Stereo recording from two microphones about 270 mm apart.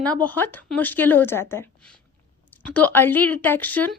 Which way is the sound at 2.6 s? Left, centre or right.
Centre.